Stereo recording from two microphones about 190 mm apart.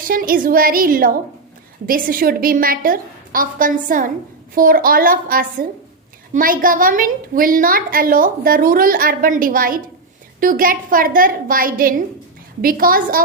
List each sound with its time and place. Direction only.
0.0 s a woman's voice: 50° right (ahead or behind)